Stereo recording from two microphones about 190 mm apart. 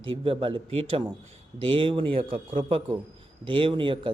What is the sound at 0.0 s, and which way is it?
A man's voice, 25° right (ahead or behind).